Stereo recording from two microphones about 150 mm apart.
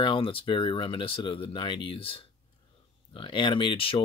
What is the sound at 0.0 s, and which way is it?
Speech, 35° left (ahead or behind).